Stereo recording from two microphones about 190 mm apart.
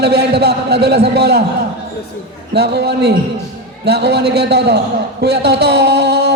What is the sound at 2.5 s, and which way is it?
A man's voice, 60° right (ahead or behind).